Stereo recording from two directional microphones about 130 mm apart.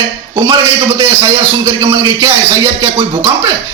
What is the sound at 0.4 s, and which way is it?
A man's voice, 35° right (ahead or behind).